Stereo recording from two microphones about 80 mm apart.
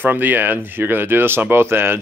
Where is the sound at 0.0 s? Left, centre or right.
Right.